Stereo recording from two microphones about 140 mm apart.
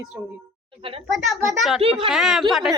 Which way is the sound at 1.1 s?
Centre (ahead or behind).